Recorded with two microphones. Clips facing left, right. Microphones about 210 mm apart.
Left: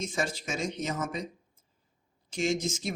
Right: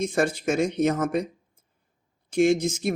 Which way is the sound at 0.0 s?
60° right (ahead or behind).